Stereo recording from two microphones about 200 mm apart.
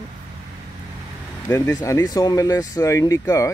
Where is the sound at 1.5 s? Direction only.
15° left (ahead or behind).